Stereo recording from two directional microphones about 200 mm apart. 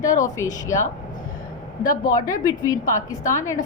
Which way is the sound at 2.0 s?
15° left (ahead or behind).